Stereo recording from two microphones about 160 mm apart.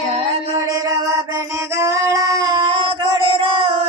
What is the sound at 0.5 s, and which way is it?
Music, 20° right (ahead or behind).